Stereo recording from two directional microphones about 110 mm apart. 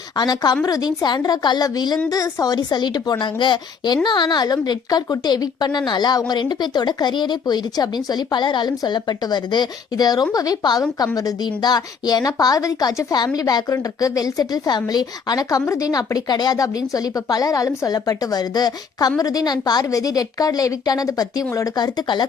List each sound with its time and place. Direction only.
0.2 s a woman's voice: 40° left (ahead or behind)